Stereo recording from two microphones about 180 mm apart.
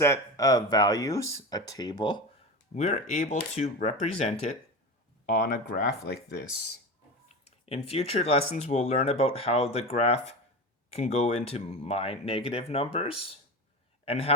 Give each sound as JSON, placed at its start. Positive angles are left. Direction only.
{"t": 0.0, "sound": "speech", "side_deg": 15}
{"t": 2.7, "sound": "speech", "side_deg": 40}
{"t": 7.3, "sound": "a man's voice", "side_deg": 35}